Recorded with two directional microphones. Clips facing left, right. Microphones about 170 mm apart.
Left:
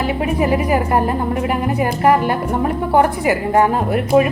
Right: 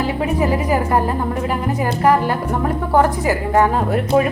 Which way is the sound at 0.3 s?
15° left (ahead or behind).